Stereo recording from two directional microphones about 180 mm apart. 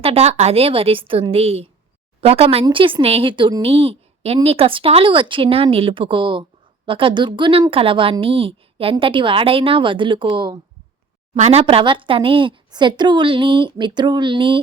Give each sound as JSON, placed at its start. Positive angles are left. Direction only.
{"t": 0.0, "sound": "a woman's voice", "side_deg": -35}
{"t": 11.3, "sound": "a woman's voice", "side_deg": -35}